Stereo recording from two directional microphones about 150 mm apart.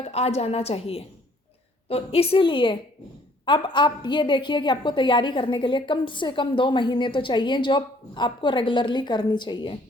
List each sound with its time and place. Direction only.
0.0 s a woman's voice: 45° left (ahead or behind)